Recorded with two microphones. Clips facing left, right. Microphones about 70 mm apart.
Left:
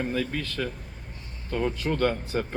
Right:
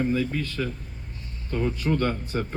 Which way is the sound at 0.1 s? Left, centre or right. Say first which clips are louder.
Right 3 dB; left.